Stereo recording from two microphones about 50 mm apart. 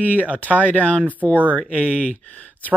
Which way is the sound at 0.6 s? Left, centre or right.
Left.